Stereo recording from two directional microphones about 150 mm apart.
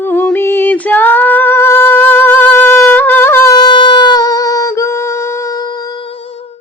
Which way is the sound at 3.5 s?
30° left (ahead or behind).